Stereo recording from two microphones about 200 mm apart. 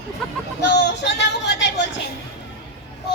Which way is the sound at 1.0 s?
60° left (ahead or behind).